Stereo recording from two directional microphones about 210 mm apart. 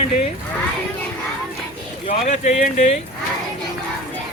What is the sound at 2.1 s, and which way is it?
Speech, 30° left (ahead or behind).